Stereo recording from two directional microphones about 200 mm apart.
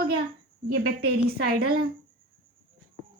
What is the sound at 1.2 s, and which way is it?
Speech, 50° right (ahead or behind).